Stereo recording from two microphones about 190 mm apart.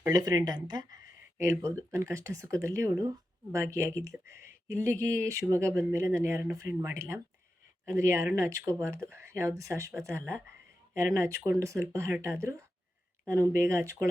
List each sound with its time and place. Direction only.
0.0 s speech: 20° right (ahead or behind)